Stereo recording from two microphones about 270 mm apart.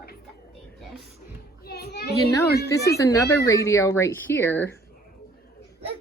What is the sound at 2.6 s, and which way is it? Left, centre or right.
Speech, centre.